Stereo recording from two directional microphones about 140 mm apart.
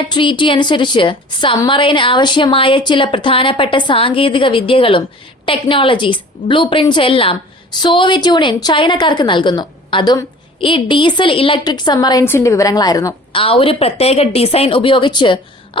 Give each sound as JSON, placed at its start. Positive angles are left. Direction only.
{"t": 0.1, "sound": "a woman's voice", "side_deg": 35}
{"t": 13.3, "sound": "a woman's voice", "side_deg": 40}